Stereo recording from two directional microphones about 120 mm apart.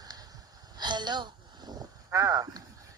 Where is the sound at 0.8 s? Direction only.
35° right (ahead or behind).